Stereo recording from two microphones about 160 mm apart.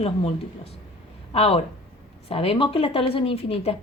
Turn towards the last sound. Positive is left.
turn(degrees=40)  # may be behind; listen again after turning